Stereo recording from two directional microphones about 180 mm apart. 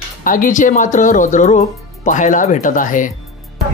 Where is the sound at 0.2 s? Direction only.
50° left (ahead or behind).